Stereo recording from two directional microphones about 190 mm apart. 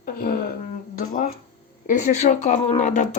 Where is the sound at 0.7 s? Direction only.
45° left (ahead or behind).